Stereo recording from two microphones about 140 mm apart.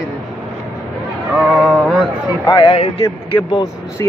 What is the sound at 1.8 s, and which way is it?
Speech, centre (ahead or behind).